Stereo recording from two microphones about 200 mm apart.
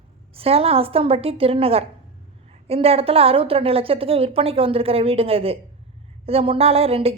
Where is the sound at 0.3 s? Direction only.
30° right (ahead or behind).